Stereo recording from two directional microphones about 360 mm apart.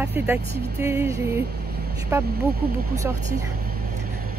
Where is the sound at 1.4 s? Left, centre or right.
Right.